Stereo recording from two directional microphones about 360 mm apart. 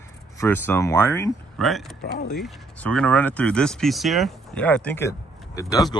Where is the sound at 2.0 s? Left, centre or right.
Left.